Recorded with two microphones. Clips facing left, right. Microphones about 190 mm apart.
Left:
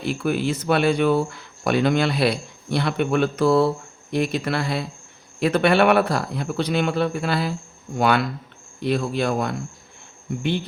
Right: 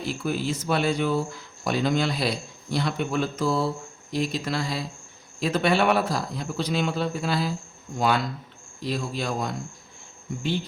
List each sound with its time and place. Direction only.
0.0 s speech: 65° left (ahead or behind)